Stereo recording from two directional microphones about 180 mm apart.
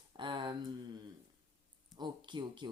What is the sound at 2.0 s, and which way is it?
Speech, 25° right (ahead or behind).